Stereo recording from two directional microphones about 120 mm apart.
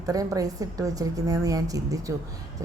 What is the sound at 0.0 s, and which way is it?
Speech, 30° right (ahead or behind).